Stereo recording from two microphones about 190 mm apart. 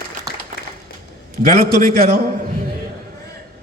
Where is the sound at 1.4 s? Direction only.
50° right (ahead or behind).